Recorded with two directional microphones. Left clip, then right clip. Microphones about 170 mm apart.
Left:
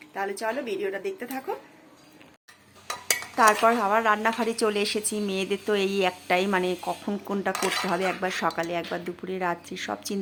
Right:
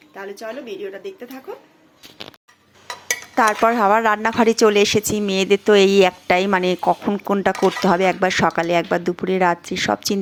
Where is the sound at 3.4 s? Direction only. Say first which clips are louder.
Right 4 dB; 35° right (ahead or behind).